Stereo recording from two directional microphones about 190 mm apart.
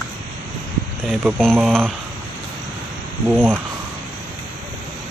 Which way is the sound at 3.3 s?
5° right (ahead or behind).